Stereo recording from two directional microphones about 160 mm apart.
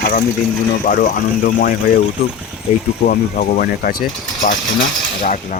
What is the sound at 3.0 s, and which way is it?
Speech, 60° left (ahead or behind).